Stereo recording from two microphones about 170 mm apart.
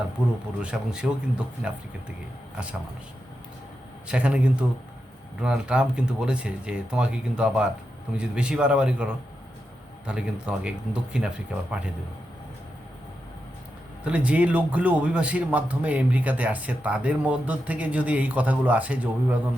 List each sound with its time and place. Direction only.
0.2 s a man's voice: 5° right (ahead or behind)
4.1 s a man's voice: 5° right (ahead or behind)
10.1 s a man's voice: 5° right (ahead or behind)
14.0 s a man's voice: 10° right (ahead or behind)